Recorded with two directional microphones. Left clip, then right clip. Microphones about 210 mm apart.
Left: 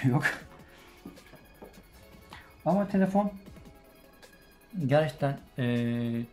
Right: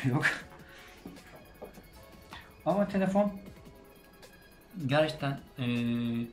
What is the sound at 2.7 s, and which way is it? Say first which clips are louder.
Speech: left 1 dB; 30° left (ahead or behind).